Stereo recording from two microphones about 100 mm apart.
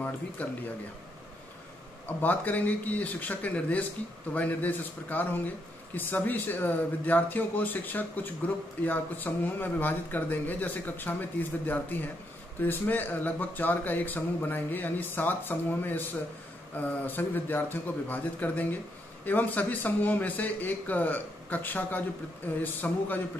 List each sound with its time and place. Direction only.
0.4 s a man's voice: 15° left (ahead or behind)
2.0 s a man's voice: 15° left (ahead or behind)